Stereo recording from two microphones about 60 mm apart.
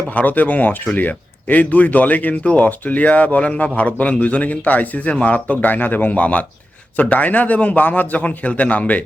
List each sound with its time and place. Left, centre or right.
0.1 s speech: left